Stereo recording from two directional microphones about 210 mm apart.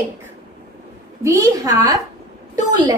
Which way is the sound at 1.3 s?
15° right (ahead or behind).